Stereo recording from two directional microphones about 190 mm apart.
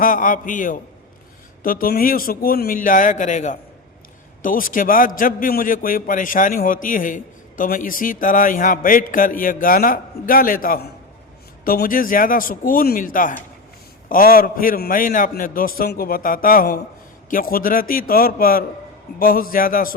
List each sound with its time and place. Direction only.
0.0 s a man's voice: 45° left (ahead or behind)